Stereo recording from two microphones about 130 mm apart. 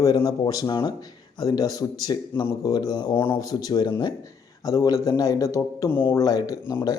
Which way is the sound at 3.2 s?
25° left (ahead or behind).